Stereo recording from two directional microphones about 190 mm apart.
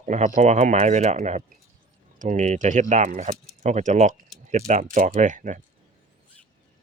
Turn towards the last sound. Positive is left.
turn(degrees=-40)  # may be behind; listen again after turning